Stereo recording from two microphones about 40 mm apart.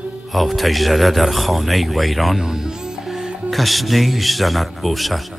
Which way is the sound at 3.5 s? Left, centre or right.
Centre.